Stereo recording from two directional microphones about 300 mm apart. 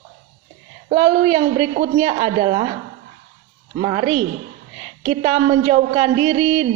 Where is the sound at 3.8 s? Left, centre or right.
Centre.